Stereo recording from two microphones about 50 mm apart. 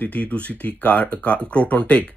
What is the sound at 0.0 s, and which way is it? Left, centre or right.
Speech, left.